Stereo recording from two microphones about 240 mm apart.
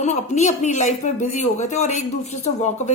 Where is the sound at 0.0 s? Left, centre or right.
Left.